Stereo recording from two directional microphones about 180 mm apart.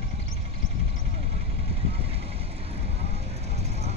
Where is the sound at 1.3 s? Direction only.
35° right (ahead or behind).